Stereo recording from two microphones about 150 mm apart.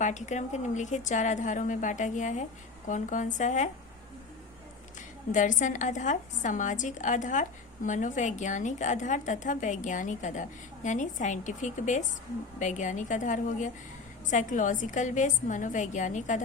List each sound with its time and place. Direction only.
0.0 s a woman's voice: 55° left (ahead or behind)
5.3 s a woman's voice: 55° left (ahead or behind)